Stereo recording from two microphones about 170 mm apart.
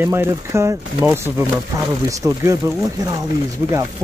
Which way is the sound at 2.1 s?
20° right (ahead or behind).